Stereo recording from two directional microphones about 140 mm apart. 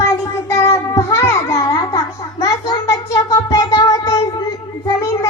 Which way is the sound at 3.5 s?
30° left (ahead or behind).